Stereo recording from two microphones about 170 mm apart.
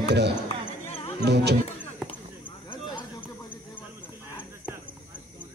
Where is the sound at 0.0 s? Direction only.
80° right.